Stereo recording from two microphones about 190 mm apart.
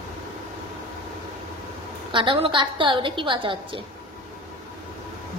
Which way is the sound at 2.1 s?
25° right (ahead or behind).